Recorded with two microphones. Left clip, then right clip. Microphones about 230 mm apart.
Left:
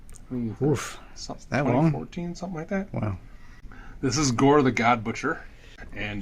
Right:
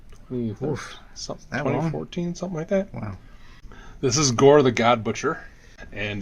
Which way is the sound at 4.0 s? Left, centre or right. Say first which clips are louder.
Right 4 dB; right.